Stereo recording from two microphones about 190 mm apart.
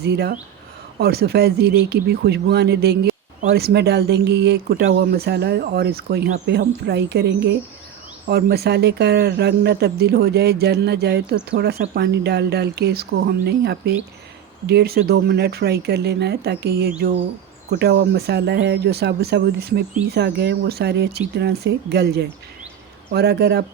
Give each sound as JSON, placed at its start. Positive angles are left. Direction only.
{"t": 0.0, "sound": "speech", "side_deg": -60}